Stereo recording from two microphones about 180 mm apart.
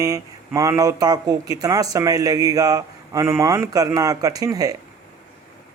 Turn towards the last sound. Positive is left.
turn(degrees=-20)  # may be behind; listen again after turning